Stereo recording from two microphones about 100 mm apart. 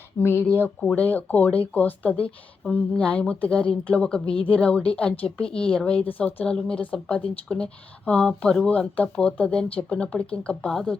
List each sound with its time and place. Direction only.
0.2 s speech: 25° left (ahead or behind); by 10.9 s 5° left (ahead or behind)